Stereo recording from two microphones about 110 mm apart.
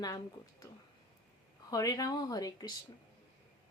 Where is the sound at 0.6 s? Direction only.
30° left (ahead or behind).